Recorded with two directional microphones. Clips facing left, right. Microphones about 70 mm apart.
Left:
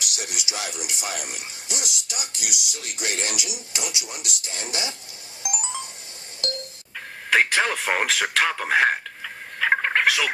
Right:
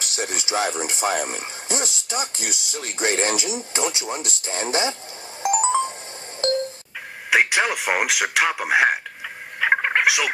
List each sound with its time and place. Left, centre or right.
0.0 s speech: right
5.4 s music: right
6.4 s a sound: right
7.3 s speech: centre